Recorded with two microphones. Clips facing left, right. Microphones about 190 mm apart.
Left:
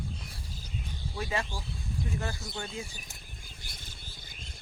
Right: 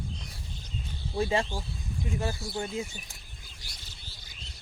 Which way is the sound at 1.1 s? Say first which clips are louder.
Right 7 dB; 35° right (ahead or behind).